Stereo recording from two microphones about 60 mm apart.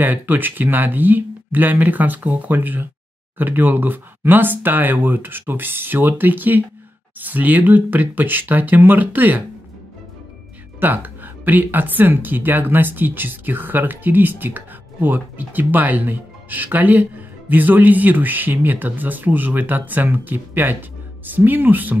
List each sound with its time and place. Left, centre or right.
0.0 s speech: right
10.8 s speech: right